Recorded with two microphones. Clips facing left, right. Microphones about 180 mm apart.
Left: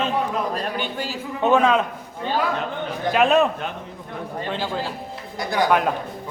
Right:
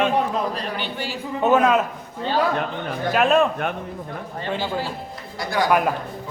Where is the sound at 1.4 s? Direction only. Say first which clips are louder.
Even; 5° right (ahead or behind).